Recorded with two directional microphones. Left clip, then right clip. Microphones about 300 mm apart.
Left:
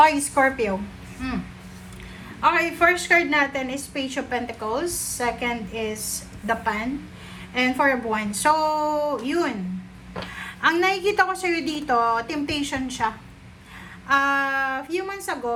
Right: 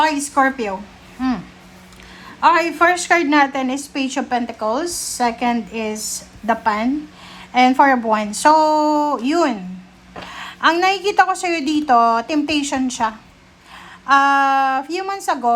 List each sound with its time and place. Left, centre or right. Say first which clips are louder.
0.3 s a woman's voice: right 3 dB; centre
2.4 s a woman's voice: right 5 dB; centre